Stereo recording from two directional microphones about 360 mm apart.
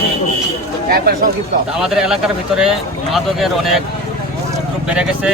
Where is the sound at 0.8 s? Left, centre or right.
Right.